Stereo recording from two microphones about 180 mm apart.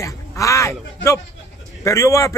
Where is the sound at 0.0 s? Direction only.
15° left (ahead or behind).